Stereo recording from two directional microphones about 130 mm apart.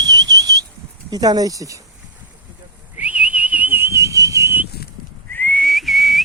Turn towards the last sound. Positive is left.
turn(degrees=0)  # may be behind; listen again after turning